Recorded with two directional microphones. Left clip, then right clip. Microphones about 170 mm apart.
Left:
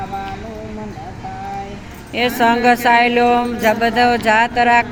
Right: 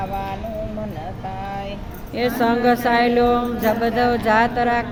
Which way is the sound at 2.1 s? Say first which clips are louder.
Left 5 dB; centre (ahead or behind).